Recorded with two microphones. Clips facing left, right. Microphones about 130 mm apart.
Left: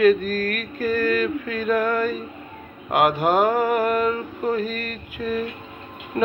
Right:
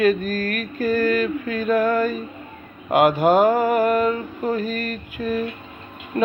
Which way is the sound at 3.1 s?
35° right (ahead or behind).